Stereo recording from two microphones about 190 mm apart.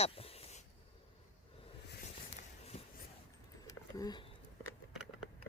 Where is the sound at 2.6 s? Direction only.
35° left (ahead or behind).